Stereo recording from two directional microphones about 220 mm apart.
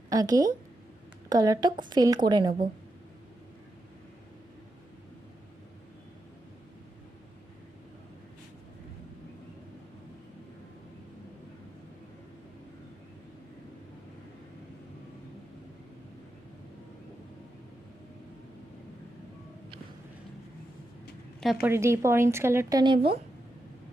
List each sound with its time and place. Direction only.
0.1 s a woman's voice: 15° right (ahead or behind)
21.4 s a woman's voice: 5° right (ahead or behind); by 23.1 s 20° right (ahead or behind)